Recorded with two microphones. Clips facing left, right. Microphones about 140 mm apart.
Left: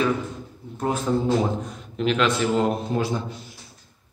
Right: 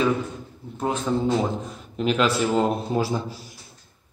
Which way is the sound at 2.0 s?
5° right (ahead or behind).